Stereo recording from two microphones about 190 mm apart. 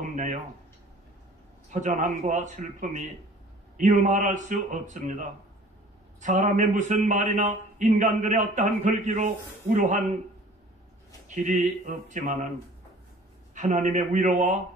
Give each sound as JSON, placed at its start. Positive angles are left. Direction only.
{"t": 0.1, "sound": "a sound", "side_deg": -40}
{"t": 1.7, "sound": "a man's voice", "side_deg": -40}
{"t": 11.2, "sound": "a man's voice", "side_deg": -40}
{"t": 13.6, "sound": "a man's voice", "side_deg": -40}